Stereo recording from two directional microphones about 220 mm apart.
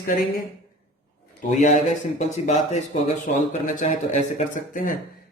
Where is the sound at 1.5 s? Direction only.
35° left (ahead or behind).